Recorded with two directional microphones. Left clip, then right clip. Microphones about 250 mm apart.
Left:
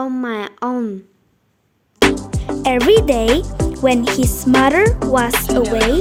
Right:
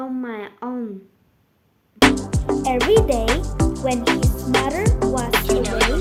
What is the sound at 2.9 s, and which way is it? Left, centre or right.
Speech, left.